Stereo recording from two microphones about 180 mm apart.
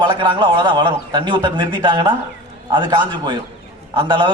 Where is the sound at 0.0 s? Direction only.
25° right (ahead or behind).